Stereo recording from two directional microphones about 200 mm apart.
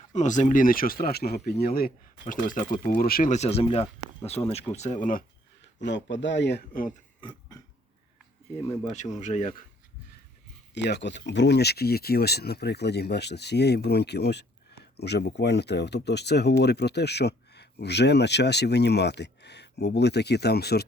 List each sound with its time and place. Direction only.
0.1 s speech: 35° left (ahead or behind)
5.8 s speech: 65° left (ahead or behind)
7.2 s a sound: 20° left (ahead or behind)
8.9 s speech: 35° left (ahead or behind)
10.8 s speech: 60° left (ahead or behind)